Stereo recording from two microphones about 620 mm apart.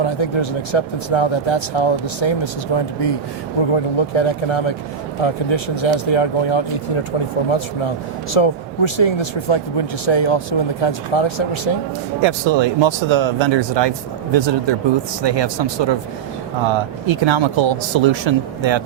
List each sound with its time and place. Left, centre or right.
0.0 s speech: left
8.3 s speech: left
12.2 s speech: right